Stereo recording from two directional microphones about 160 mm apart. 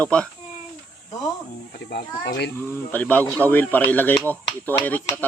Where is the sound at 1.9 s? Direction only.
90° left.